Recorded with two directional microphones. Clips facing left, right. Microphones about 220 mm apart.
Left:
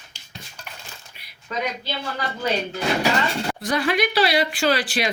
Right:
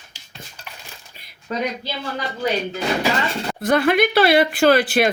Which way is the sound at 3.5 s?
55° right (ahead or behind).